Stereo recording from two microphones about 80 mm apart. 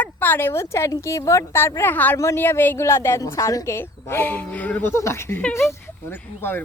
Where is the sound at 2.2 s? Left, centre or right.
Left.